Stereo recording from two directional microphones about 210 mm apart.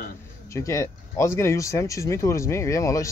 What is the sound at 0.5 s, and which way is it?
Speech, 15° left (ahead or behind).